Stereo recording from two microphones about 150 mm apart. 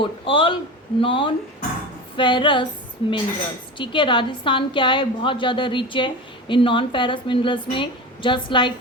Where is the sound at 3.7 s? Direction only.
35° left (ahead or behind).